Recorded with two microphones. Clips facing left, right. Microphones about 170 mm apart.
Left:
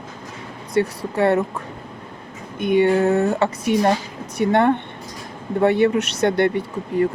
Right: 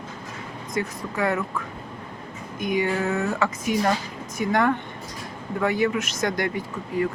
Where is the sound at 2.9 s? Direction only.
35° left (ahead or behind).